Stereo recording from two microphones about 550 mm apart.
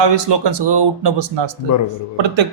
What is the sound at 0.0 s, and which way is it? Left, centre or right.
Speech, right.